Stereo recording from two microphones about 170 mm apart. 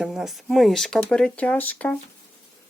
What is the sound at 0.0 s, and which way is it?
Speech, centre (ahead or behind).